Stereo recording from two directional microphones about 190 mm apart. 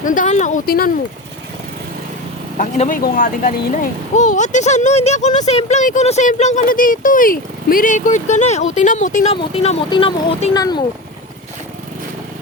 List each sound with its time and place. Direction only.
0.0 s speech: 45° left (ahead or behind)
2.6 s speech: 40° left (ahead or behind); by 10.8 s 20° left (ahead or behind)